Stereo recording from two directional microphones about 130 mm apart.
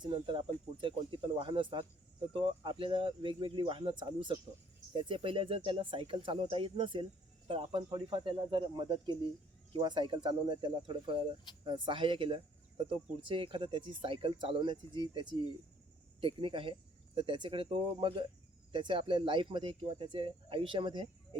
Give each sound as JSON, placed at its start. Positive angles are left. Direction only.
{"t": 0.0, "sound": "speech", "side_deg": -40}